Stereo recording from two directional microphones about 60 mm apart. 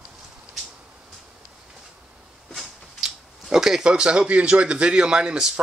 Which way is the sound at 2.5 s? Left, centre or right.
Centre.